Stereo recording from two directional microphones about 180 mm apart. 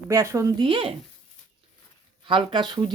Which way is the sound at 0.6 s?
30° right (ahead or behind).